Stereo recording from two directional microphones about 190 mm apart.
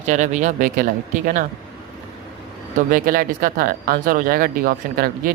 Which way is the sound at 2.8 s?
45° right (ahead or behind).